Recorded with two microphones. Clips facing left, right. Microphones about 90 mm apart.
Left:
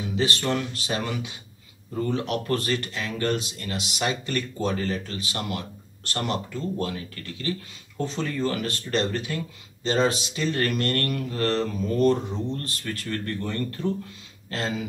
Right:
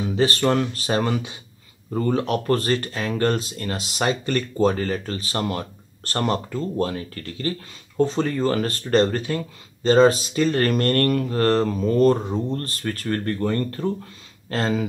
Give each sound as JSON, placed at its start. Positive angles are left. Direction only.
{"t": 0.0, "sound": "speech", "side_deg": -40}